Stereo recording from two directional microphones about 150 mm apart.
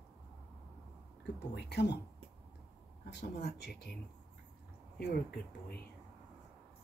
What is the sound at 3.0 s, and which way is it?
Speech, 90° left.